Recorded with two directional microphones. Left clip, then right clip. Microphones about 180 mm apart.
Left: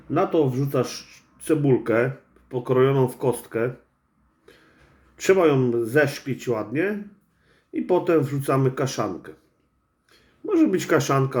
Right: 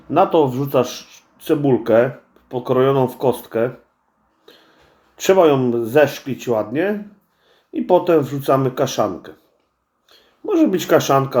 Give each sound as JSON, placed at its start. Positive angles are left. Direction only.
{"t": 0.3, "sound": "speech", "side_deg": 10}
{"t": 5.4, "sound": "speech", "side_deg": 10}
{"t": 7.7, "sound": "speech", "side_deg": 10}